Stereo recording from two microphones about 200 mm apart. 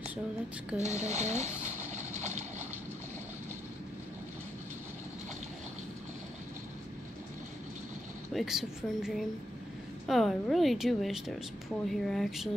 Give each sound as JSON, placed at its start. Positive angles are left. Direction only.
{"t": 0.7, "sound": "speech", "side_deg": 15}
{"t": 1.0, "sound": "speech", "side_deg": -35}
{"t": 1.9, "sound": "a sound", "side_deg": -35}
{"t": 8.3, "sound": "a woman's voice", "side_deg": 0}